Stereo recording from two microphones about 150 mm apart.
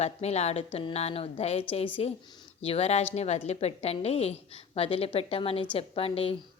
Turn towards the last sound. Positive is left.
turn(degrees=40)  # may be behind; listen again after turning